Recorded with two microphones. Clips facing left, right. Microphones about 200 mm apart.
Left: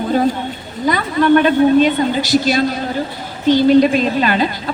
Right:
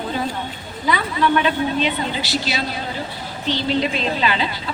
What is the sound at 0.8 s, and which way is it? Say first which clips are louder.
A woman's voice: left 6 dB; 50° left (ahead or behind).